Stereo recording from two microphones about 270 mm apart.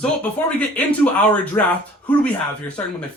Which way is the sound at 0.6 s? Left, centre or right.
Centre.